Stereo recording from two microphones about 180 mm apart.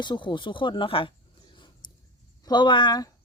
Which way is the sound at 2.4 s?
25° left (ahead or behind).